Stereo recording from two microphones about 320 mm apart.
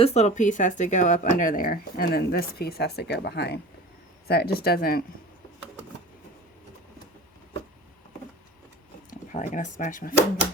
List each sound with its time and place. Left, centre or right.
0.0 s speech: left
9.0 s speech: left